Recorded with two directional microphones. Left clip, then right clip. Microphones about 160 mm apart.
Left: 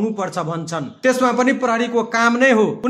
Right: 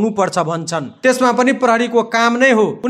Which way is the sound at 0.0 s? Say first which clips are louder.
Right 6 dB; 35° right (ahead or behind).